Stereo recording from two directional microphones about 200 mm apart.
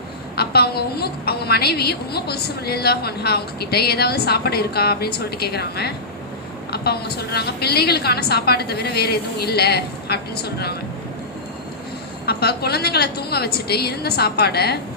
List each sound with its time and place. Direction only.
0.3 s a woman's voice: 50° left (ahead or behind)
12.2 s a woman's voice: 50° left (ahead or behind)